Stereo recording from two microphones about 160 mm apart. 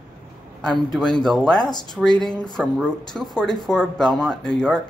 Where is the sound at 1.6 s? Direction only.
25° left (ahead or behind).